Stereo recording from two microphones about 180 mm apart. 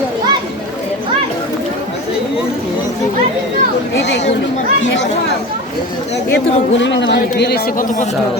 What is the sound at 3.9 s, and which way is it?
Speech, 75° left (ahead or behind).